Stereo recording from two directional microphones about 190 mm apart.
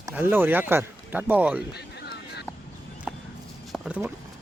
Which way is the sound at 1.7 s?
60° left (ahead or behind).